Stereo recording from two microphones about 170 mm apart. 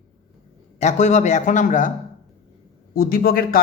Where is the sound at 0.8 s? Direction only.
45° left (ahead or behind).